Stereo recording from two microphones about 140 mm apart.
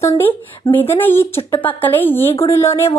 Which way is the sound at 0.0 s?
15° left (ahead or behind).